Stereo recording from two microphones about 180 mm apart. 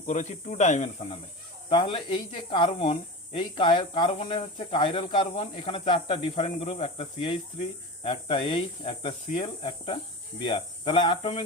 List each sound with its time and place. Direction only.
0.0 s speech: 40° left (ahead or behind)